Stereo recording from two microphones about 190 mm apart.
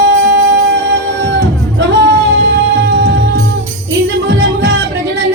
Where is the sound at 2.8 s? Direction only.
60° right (ahead or behind).